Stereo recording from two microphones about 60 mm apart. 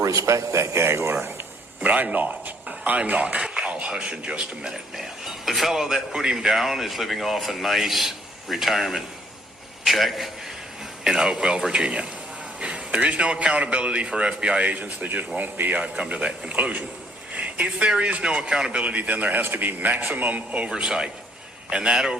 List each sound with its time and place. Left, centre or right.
0.0 s a man's voice: right
1.8 s a man's voice: right
4.9 s a man's voice: centre